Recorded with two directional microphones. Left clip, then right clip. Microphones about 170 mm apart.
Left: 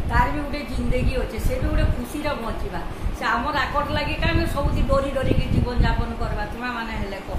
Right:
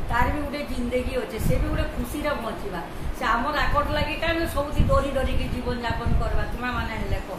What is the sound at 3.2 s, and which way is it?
A woman's voice, 15° left (ahead or behind).